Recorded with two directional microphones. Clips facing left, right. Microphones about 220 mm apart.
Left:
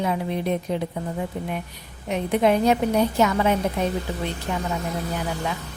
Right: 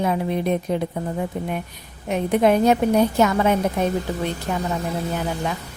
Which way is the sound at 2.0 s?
50° right (ahead or behind).